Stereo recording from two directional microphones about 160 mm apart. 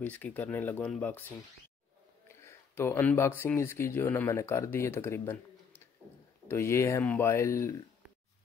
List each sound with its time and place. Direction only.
0.0 s speech: 10° left (ahead or behind)